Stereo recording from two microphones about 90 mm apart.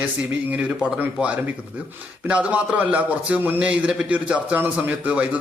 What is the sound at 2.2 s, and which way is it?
A man's voice, 15° right (ahead or behind).